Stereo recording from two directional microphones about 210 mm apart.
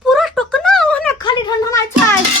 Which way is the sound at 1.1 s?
20° left (ahead or behind).